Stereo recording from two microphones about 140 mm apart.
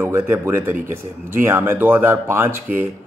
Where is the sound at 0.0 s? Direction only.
15° right (ahead or behind).